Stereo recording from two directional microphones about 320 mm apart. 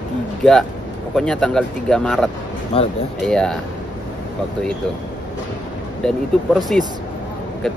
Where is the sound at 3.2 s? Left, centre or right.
Centre.